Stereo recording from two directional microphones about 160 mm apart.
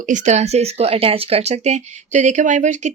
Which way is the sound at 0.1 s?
45° right (ahead or behind).